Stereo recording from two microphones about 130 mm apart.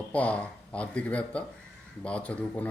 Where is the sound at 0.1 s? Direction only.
10° left (ahead or behind).